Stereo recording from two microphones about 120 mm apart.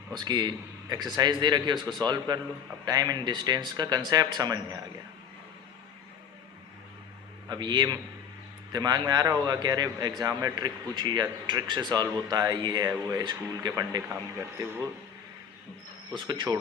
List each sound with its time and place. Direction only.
0.3 s a man's voice: 35° right (ahead or behind)
7.4 s a man's voice: 35° right (ahead or behind)
14.1 s speech: 20° right (ahead or behind)
16.1 s a man's voice: 40° right (ahead or behind)